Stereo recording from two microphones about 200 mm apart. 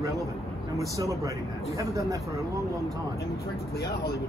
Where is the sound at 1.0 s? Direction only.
15° right (ahead or behind).